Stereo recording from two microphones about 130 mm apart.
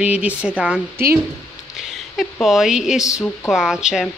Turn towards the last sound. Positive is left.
turn(degrees=-5)  # may be behind; listen again after turning